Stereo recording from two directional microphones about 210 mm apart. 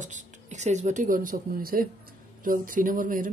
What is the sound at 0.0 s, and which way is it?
Speech, 35° right (ahead or behind).